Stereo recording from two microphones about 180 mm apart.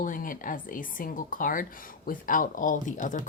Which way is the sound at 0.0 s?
50° left (ahead or behind).